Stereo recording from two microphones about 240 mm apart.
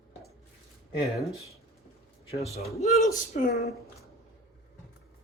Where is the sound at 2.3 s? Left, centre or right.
Left.